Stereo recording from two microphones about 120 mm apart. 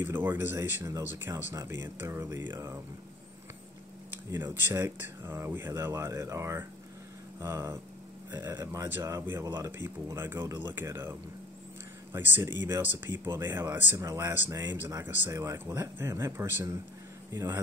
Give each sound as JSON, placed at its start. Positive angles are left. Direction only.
{"t": 0.0, "sound": "speech", "side_deg": -15}
{"t": 4.4, "sound": "speech", "side_deg": -20}